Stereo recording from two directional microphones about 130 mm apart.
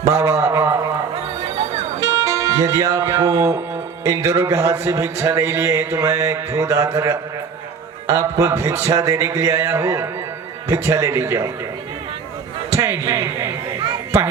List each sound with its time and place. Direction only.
0.0 s a man's voice: 20° right (ahead or behind)
2.0 s a man's voice: 20° right (ahead or behind)
12.7 s a sound: 20° right (ahead or behind)